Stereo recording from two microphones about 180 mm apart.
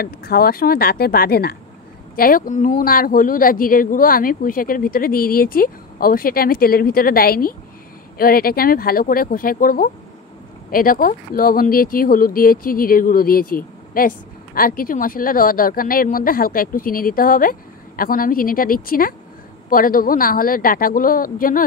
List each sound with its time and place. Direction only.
0.0 s speech: 60° left (ahead or behind)